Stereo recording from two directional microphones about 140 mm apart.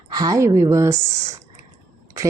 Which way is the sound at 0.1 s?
25° right (ahead or behind).